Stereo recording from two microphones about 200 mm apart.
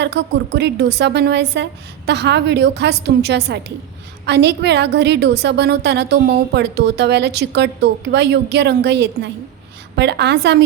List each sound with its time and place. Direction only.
0.0 s a woman's voice: 55° right (ahead or behind)